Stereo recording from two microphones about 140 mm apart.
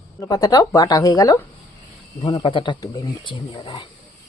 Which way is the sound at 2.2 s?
35° left (ahead or behind).